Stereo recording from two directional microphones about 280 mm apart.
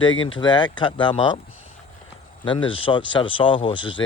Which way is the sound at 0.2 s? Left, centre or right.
Centre.